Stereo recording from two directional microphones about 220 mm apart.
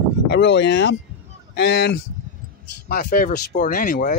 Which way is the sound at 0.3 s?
50° left (ahead or behind).